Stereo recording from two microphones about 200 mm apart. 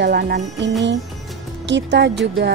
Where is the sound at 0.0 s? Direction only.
55° right (ahead or behind).